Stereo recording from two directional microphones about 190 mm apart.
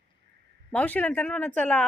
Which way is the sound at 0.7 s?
10° left (ahead or behind).